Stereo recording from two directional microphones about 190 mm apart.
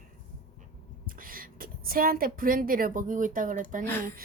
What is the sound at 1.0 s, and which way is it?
A woman's voice, 50° right (ahead or behind).